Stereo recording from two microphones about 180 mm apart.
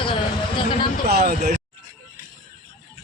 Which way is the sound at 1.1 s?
60° right (ahead or behind).